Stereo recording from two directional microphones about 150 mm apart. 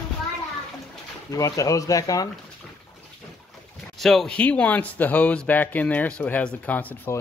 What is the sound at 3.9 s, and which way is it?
Speech, centre (ahead or behind).